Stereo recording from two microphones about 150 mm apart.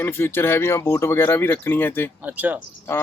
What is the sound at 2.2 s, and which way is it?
Speech, 10° right (ahead or behind).